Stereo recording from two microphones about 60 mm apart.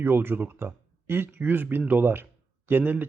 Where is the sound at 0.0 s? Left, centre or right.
Right.